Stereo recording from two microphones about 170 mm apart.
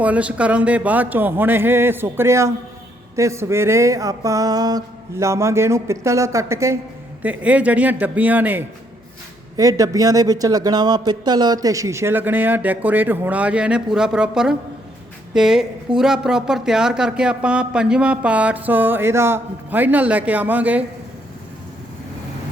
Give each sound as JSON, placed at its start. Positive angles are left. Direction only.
{"t": 0.0, "sound": "speech", "side_deg": -5}
{"t": 9.6, "sound": "a woman's voice", "side_deg": -20}